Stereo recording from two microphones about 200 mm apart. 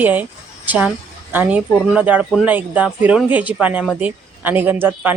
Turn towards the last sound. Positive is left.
turn(degrees=-10)  # may be behind; listen again after turning